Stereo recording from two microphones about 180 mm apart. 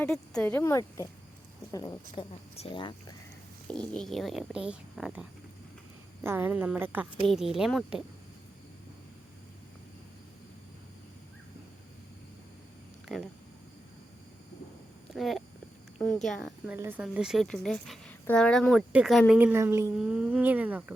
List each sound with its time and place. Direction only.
0.0 s speech: 5° left (ahead or behind); by 2.9 s 30° left (ahead or behind)
3.7 s speech: 5° left (ahead or behind)
15.1 s speech: centre (ahead or behind)
16.6 s speech: 10° right (ahead or behind)